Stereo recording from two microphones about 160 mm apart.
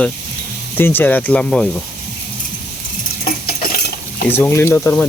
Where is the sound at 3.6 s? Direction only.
65° left (ahead or behind).